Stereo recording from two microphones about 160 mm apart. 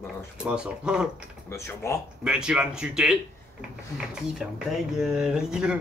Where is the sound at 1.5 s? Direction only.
15° left (ahead or behind).